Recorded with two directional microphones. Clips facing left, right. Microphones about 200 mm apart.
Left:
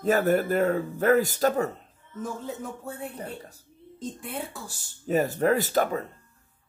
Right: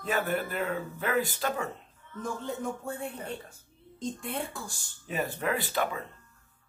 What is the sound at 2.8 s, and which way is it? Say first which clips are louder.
Speech: right 1 dB; 5° left (ahead or behind).